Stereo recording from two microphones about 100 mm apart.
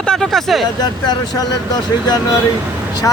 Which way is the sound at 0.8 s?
45° left (ahead or behind).